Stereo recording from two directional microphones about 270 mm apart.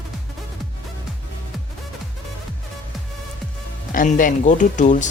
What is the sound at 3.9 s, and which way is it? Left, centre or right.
Speech, left.